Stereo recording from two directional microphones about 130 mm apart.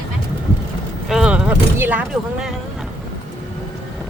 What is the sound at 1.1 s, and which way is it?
Speech, 10° right (ahead or behind).